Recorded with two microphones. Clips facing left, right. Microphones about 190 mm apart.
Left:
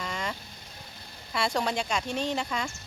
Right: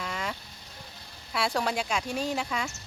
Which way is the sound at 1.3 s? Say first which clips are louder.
Even; 5° right (ahead or behind).